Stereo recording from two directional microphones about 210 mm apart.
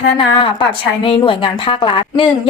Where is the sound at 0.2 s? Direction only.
25° left (ahead or behind).